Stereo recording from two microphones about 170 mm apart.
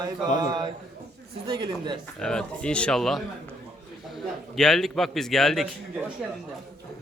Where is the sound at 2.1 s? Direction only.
5° left (ahead or behind).